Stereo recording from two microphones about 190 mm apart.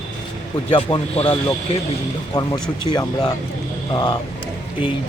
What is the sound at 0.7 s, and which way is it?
Speech, 30° left (ahead or behind).